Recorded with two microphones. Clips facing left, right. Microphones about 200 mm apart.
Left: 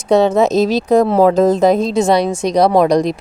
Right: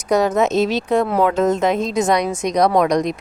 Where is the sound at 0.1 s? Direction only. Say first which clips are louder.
Left 4 dB; 25° left (ahead or behind).